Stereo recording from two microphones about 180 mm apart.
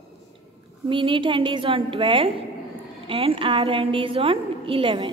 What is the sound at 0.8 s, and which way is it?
A woman's voice, 30° right (ahead or behind).